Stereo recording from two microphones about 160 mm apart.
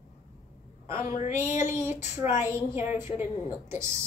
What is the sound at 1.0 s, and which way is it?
Speech, 50° left (ahead or behind).